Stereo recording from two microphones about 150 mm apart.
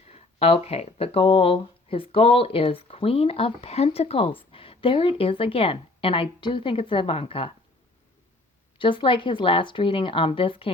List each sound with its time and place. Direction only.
0.1 s speech: 40° left (ahead or behind)
8.8 s speech: 35° left (ahead or behind)